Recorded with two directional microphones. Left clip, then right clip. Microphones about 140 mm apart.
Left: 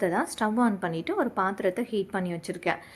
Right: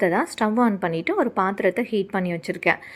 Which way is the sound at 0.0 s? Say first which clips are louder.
Right 5 dB; 30° right (ahead or behind).